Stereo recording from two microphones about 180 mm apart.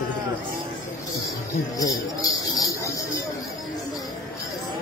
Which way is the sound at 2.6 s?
20° left (ahead or behind).